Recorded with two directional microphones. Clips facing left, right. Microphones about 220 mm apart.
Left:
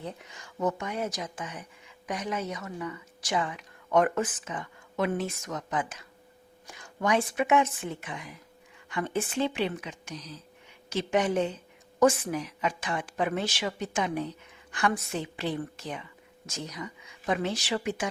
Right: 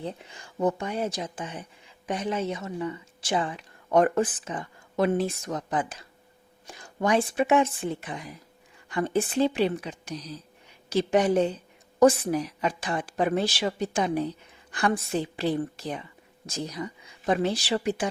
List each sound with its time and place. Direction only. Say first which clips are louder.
0.0 s a woman's voice: right 4 dB; 30° right (ahead or behind)